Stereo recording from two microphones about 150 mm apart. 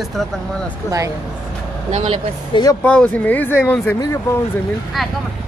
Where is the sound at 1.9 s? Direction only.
50° right (ahead or behind).